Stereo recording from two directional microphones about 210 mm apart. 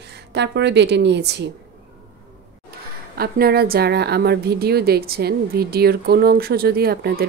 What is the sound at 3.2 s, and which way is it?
A woman's voice, 45° right (ahead or behind).